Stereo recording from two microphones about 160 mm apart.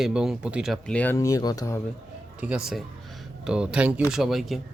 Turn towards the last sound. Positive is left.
turn(degrees=0)  # may be behind; listen again after turning